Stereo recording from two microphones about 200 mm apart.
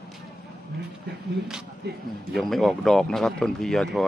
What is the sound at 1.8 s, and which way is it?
Speech, 55° right (ahead or behind).